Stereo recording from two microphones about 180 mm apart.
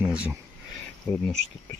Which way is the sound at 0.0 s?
5° right (ahead or behind).